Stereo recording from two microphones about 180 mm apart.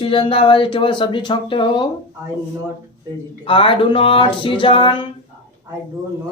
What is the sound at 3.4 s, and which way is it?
Speech, 30° left (ahead or behind).